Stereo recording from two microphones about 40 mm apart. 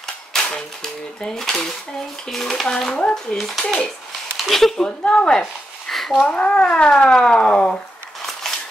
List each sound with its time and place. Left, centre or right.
0.0 s speech: centre
2.6 s speech: centre
3.3 s speech: centre
4.8 s speech: left
5.9 s a sound: centre
6.2 s speech: left
8.5 s scissors: centre